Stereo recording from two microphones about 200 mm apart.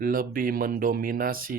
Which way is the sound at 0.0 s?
45° right (ahead or behind).